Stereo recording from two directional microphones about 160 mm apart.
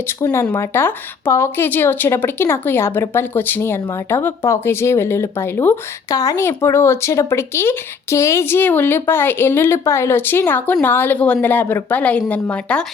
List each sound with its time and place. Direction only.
0.2 s a woman's voice: 15° left (ahead or behind)